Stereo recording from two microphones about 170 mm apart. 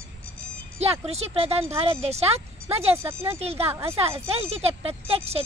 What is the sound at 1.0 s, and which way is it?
Speech, 35° right (ahead or behind).